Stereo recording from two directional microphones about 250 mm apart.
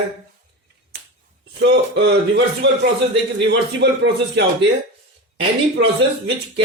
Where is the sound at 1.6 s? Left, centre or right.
Right.